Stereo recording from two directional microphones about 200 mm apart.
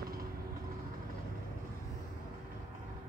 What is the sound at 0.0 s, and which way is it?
Vehicle, 45° right (ahead or behind).